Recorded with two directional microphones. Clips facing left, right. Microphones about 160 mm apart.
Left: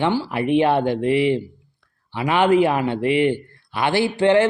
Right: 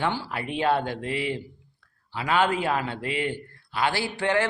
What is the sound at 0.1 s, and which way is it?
Speech, 15° left (ahead or behind).